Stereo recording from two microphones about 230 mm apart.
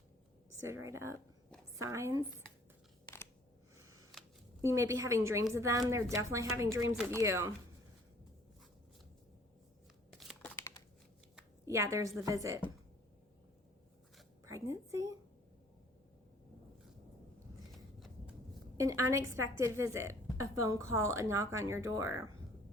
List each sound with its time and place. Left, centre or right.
0.7 s a woman's voice: centre
3.8 s camera: centre
4.6 s a woman's voice: centre
10.1 s a sound: centre
11.3 s a sound: centre
12.2 s a woman's voice: centre
14.4 s a woman's voice: centre
18.8 s a woman's voice: centre